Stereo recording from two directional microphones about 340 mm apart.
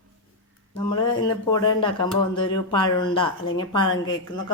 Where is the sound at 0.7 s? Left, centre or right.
Centre.